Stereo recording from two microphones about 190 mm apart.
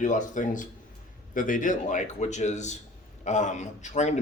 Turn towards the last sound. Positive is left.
turn(degrees=40)  # may be behind; listen again after turning